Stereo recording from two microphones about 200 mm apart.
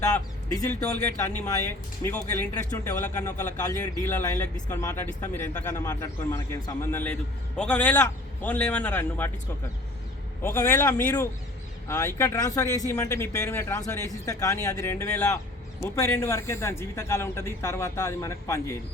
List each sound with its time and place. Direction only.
1.4 s speech: 15° left (ahead or behind)
10.4 s speech: 10° left (ahead or behind)